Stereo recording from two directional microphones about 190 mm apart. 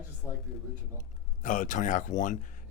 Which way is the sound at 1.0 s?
45° left (ahead or behind).